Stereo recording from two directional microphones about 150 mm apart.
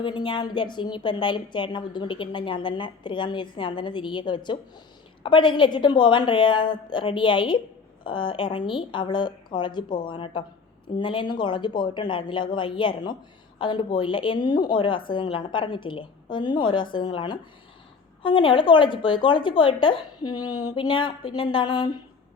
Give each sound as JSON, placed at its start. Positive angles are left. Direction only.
{"t": 0.0, "sound": "speech", "side_deg": 35}